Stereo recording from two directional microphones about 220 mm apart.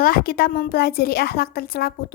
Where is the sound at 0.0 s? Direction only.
40° left (ahead or behind).